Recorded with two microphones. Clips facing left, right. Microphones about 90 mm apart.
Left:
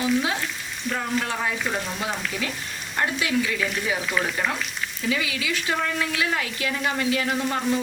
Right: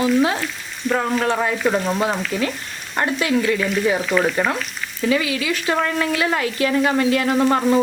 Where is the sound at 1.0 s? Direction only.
60° right (ahead or behind).